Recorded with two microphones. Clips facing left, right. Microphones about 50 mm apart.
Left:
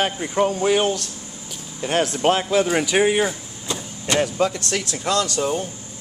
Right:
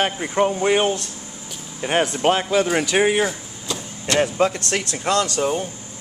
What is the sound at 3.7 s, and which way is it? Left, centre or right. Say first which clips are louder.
Vehicle: even; left.